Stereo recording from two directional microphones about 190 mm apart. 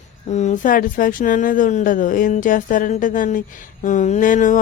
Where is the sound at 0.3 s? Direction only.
40° left (ahead or behind).